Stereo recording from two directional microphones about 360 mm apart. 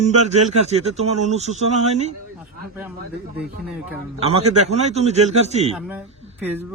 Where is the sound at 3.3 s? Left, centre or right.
Centre.